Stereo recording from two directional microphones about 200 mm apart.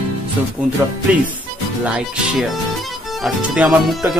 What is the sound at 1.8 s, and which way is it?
Speech, 5° right (ahead or behind).